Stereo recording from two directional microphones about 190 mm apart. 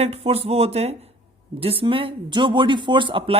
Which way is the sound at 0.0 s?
30° right (ahead or behind).